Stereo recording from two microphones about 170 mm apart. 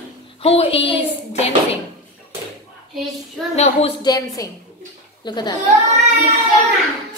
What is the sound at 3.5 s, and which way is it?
Speech, 40° left (ahead or behind).